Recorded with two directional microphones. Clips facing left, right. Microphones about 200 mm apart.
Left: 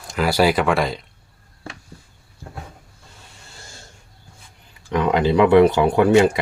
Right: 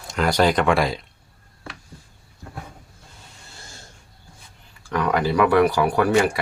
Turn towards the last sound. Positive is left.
turn(degrees=20)  # may be behind; listen again after turning